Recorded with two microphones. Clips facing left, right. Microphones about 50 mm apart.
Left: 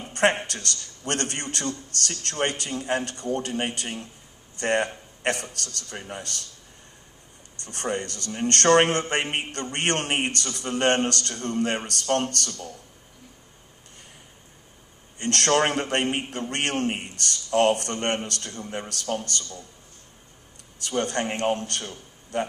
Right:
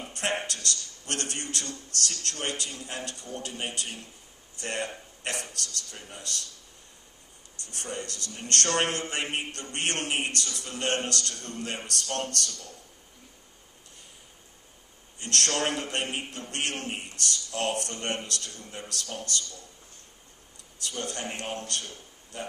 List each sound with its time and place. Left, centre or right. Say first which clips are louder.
0.1 s speech: left 9 dB; left
7.6 s speech: left 8 dB; left
15.1 s speech: left 7 dB; left
20.8 s speech: left 8 dB; left